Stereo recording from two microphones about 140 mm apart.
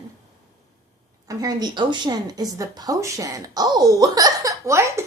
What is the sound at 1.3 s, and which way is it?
A woman's voice, 25° right (ahead or behind).